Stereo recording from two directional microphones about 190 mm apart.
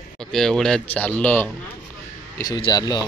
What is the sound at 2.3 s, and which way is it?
Speech, 20° left (ahead or behind).